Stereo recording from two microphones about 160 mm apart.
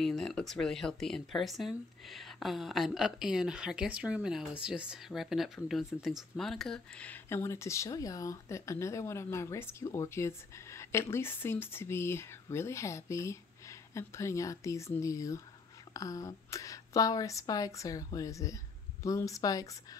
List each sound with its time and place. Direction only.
0.0 s a woman's voice: centre (ahead or behind); by 20.0 s 20° left (ahead or behind)